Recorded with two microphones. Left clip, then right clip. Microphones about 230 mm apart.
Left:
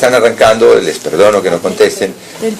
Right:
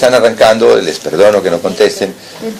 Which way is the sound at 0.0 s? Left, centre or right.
Centre.